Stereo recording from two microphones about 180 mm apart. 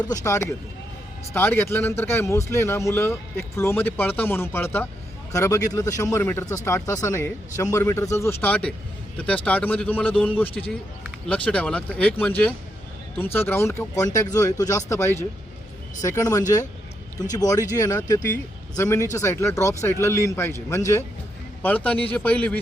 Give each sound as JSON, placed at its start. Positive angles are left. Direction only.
{"t": 0.0, "sound": "a man's voice", "side_deg": 20}
{"t": 13.1, "sound": "a man's voice", "side_deg": 10}